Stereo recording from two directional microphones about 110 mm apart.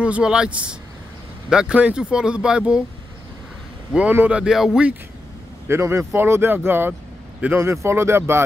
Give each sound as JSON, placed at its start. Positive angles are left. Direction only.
{"t": 0.0, "sound": "speech", "side_deg": -10}
{"t": 3.9, "sound": "speech", "side_deg": -15}
{"t": 5.7, "sound": "speech", "side_deg": -25}